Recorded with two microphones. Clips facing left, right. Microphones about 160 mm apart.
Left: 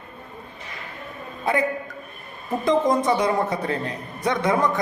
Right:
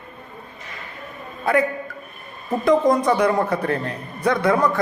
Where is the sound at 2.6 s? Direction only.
25° left (ahead or behind).